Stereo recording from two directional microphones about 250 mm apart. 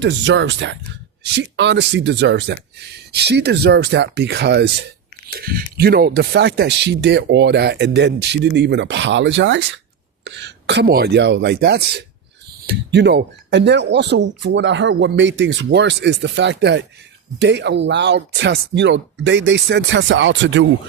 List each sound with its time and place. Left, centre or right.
0.0 s speech: right